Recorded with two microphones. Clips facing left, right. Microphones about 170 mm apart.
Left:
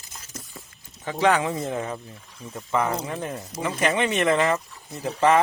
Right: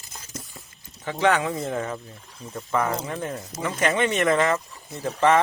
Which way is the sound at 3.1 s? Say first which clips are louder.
Even; 25° left (ahead or behind).